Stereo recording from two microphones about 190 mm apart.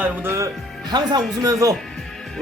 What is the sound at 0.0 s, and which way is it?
A man's voice, 10° right (ahead or behind).